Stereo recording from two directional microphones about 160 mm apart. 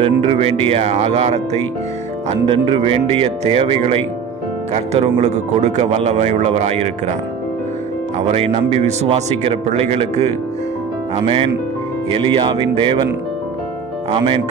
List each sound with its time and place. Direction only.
0.0 s a man's voice: 35° right (ahead or behind)
2.2 s a man's voice: 30° right (ahead or behind)
8.3 s a man's voice: 40° right (ahead or behind)
12.1 s a man's voice: 30° right (ahead or behind)
14.1 s a man's voice: 35° right (ahead or behind)